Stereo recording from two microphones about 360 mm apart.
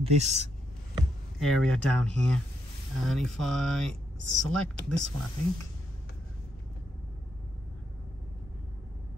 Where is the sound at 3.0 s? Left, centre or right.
Centre.